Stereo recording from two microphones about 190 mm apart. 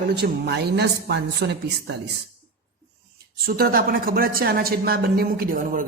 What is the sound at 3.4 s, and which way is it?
A woman's voice, 50° right (ahead or behind).